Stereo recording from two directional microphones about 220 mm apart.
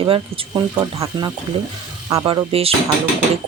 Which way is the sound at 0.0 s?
20° right (ahead or behind).